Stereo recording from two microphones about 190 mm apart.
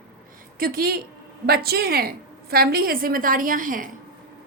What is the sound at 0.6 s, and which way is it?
A woman's voice, 50° right (ahead or behind).